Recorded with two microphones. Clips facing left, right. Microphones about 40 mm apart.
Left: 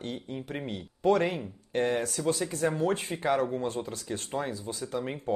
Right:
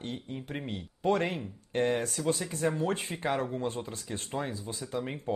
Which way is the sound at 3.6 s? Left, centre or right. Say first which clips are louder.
Left 2 dB; centre.